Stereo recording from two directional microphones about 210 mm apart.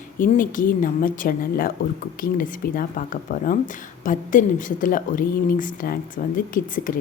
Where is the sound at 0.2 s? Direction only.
40° left (ahead or behind).